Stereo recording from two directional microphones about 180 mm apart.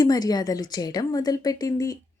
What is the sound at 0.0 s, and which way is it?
Speech, 20° left (ahead or behind).